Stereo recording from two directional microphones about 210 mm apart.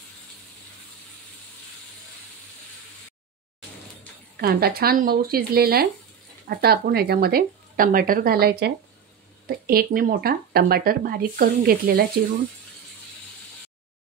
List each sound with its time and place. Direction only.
4.4 s speech: 45° right (ahead or behind)